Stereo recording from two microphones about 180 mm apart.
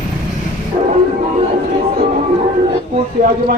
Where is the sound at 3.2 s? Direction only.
45° right (ahead or behind).